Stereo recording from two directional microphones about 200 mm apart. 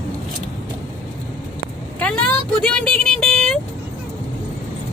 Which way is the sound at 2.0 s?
5° left (ahead or behind).